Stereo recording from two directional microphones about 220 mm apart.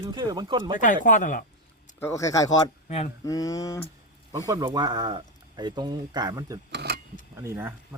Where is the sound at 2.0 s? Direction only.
15° left (ahead or behind).